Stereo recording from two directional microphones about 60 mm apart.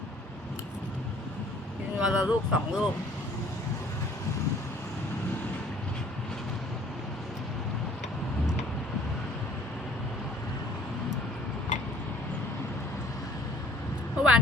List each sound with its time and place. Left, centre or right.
2.0 s speech: centre
14.2 s vehicle: centre